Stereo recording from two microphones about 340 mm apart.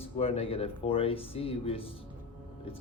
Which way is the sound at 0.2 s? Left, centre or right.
Centre.